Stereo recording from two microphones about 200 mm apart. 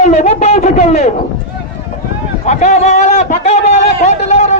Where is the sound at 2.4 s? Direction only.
35° left (ahead or behind).